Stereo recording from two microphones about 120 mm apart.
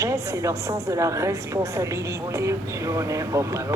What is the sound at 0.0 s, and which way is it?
A woman's voice, 25° right (ahead or behind).